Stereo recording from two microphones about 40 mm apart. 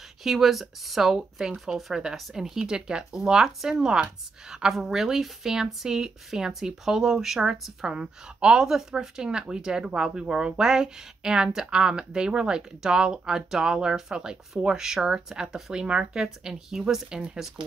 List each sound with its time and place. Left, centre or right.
0.2 s speech: centre
2.3 s speech: centre
7.8 s a woman's voice: right
16.1 s speech: centre